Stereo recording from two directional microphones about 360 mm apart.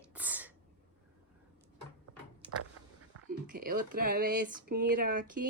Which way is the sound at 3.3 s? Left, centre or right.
Right.